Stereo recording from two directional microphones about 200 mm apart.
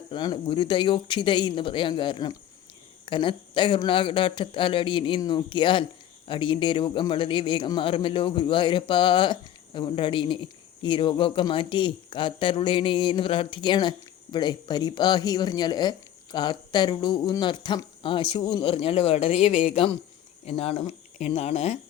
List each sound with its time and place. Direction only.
0.1 s a man's voice: 25° left (ahead or behind)